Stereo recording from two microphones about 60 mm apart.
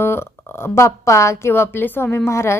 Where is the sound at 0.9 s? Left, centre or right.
Left.